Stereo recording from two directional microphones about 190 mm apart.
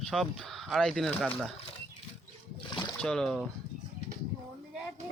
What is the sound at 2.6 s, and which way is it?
Rowboat, 25° left (ahead or behind).